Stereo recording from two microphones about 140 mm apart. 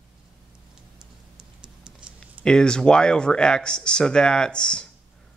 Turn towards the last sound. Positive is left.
turn(degrees=5)  # may be behind; listen again after turning